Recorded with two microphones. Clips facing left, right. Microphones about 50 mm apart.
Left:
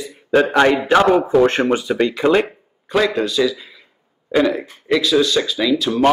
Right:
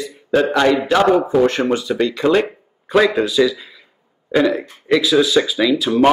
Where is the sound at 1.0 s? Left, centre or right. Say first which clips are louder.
Right 2 dB; centre.